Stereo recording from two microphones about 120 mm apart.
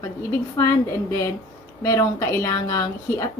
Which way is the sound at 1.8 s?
25° left (ahead or behind).